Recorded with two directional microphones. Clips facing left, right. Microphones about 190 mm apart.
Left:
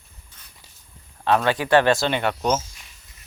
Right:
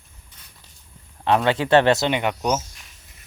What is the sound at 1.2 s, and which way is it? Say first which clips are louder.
Speech: right 1 dB; 20° right (ahead or behind).